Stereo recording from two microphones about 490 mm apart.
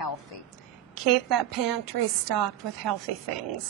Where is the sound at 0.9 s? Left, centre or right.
Right.